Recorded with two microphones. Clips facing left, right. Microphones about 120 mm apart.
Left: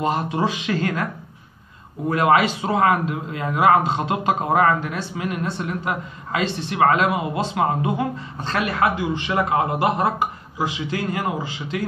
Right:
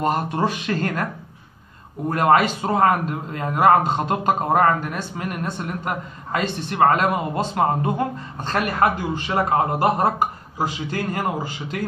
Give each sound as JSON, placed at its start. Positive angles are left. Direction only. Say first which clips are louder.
{"t": 0.0, "sound": "a man's voice", "louder": "even", "side_deg": -50}
{"t": 2.0, "sound": "a man's voice", "louder": "even", "side_deg": -45}
{"t": 7.1, "sound": "a man's voice", "louder": "even", "side_deg": 5}
{"t": 7.3, "sound": "a man's voice", "louder": "right 1 dB", "side_deg": -45}